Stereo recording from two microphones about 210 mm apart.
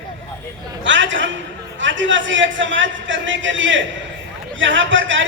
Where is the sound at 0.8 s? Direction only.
60° right (ahead or behind).